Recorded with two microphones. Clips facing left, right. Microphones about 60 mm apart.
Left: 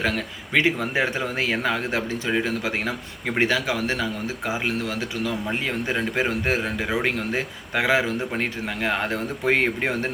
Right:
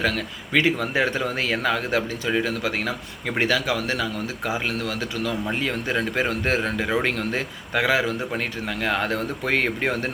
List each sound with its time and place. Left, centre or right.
0.0 s speech: left